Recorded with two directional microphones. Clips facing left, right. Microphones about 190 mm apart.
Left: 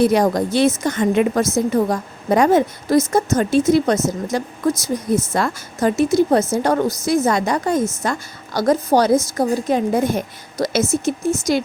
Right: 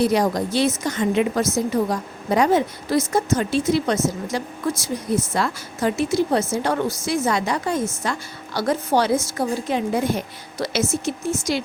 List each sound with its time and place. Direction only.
0.0 s a woman's voice: 50° left (ahead or behind)